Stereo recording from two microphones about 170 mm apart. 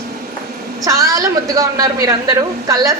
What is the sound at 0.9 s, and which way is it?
A woman's voice, 20° right (ahead or behind).